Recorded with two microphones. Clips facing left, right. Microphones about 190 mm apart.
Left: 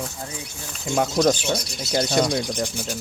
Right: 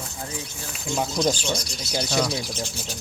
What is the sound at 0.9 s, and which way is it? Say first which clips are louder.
Speech: left 5 dB; 60° left (ahead or behind).